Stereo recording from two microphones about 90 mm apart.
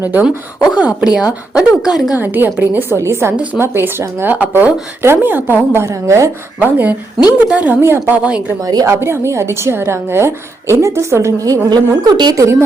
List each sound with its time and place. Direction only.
0.0 s speech: 20° right (ahead or behind)
0.3 s a woman's voice: 10° right (ahead or behind)
2.1 s speech: 20° right (ahead or behind)
3.3 s a woman's voice: 15° right (ahead or behind)
3.6 s speech: 25° right (ahead or behind)
6.6 s a woman's voice: 20° right (ahead or behind)
8.6 s a woman's voice: 40° right (ahead or behind)
12.0 s a woman's voice: 55° right (ahead or behind)
12.3 s a woman's voice: 35° right (ahead or behind)